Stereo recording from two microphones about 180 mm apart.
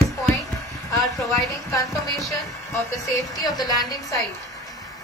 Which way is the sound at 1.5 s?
15° left (ahead or behind).